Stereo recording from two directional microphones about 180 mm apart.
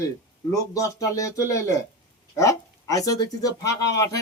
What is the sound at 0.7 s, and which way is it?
Speech, 20° left (ahead or behind).